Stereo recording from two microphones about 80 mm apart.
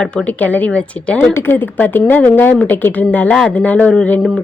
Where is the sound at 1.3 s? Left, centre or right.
Left.